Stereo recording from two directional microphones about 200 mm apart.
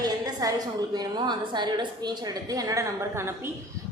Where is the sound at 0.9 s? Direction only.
20° right (ahead or behind).